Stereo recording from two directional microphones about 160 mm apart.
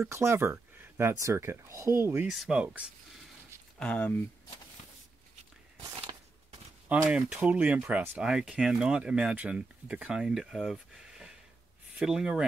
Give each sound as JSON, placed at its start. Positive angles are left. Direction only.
{"t": 0.1, "sound": "speech", "side_deg": -15}
{"t": 2.3, "sound": "speech", "side_deg": -5}
{"t": 3.8, "sound": "speech", "side_deg": 10}
{"t": 7.1, "sound": "speech", "side_deg": -5}